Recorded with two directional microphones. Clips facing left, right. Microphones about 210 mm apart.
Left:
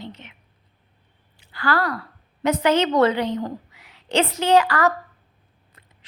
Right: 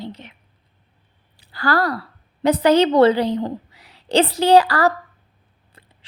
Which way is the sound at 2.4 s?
35° right (ahead or behind).